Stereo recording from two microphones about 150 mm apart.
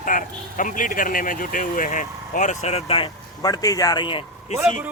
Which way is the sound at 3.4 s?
25° left (ahead or behind).